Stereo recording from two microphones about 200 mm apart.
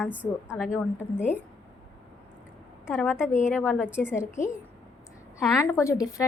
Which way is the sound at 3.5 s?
10° left (ahead or behind).